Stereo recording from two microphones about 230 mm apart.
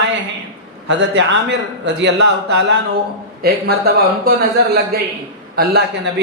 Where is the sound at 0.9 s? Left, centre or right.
Right.